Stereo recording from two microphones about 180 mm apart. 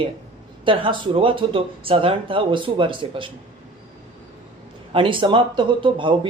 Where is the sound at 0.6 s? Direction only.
30° right (ahead or behind).